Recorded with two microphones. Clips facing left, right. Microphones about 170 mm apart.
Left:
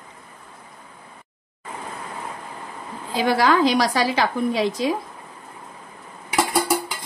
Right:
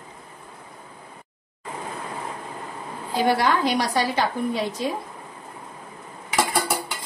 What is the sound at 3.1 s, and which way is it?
A woman's voice, 90° left.